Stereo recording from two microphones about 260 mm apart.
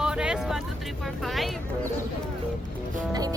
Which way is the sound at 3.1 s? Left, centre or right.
Centre.